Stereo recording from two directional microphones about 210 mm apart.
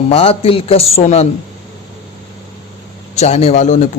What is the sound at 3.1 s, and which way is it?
Speech, 30° left (ahead or behind).